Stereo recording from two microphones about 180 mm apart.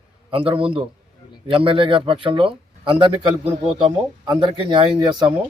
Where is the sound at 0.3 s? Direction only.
30° right (ahead or behind).